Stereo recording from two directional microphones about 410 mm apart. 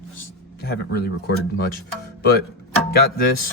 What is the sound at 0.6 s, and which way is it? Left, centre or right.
Speech, left.